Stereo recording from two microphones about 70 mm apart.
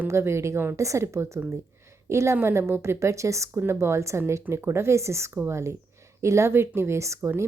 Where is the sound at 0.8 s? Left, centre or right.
Right.